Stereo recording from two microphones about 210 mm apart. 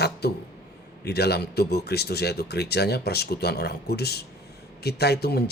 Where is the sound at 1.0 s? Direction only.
50° left (ahead or behind).